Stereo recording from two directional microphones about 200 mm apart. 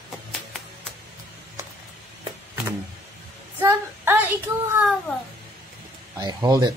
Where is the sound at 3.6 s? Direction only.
10° right (ahead or behind).